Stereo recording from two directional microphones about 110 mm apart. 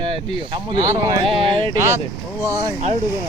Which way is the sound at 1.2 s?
50° right (ahead or behind).